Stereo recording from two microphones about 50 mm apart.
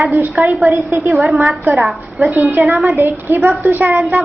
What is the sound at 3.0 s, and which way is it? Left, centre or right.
Speech, right.